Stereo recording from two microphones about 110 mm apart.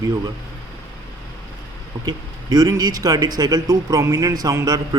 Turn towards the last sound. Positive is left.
turn(degrees=-35)  # may be behind; listen again after turning